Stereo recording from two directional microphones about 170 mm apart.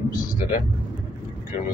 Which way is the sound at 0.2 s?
50° left (ahead or behind).